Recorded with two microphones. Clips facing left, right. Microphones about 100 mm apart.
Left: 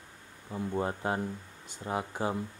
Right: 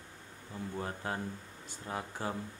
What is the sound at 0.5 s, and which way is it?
Speech, 30° left (ahead or behind).